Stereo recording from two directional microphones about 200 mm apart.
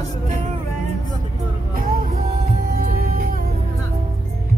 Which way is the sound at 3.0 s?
45° right (ahead or behind).